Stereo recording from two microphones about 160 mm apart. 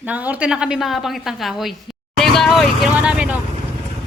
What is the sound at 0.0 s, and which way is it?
A woman's voice, 10° right (ahead or behind).